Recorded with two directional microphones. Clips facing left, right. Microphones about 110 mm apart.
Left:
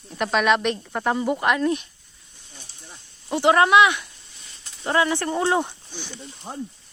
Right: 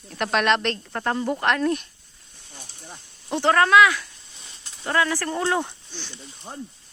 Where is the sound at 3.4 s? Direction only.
15° left (ahead or behind).